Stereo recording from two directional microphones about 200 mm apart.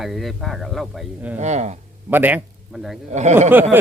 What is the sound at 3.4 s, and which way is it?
Speech, 10° right (ahead or behind).